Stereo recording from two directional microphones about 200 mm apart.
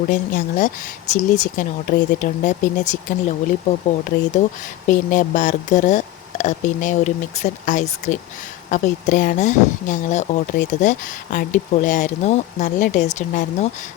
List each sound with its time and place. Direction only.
0.1 s speech: 40° left (ahead or behind)
4.9 s speech: 40° left (ahead or behind)